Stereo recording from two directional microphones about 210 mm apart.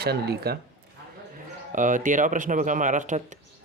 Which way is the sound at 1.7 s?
40° right (ahead or behind).